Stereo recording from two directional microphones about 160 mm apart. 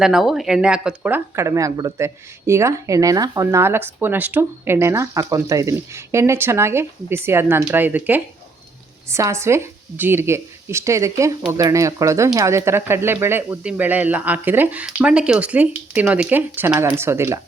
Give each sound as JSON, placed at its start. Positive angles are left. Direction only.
{"t": 0.0, "sound": "speech", "side_deg": 0}